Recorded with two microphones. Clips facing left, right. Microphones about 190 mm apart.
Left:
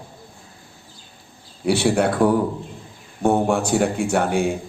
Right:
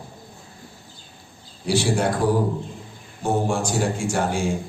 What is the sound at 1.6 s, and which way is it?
A man's voice, 60° left (ahead or behind).